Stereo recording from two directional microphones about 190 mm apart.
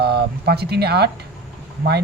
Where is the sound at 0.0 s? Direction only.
55° right (ahead or behind).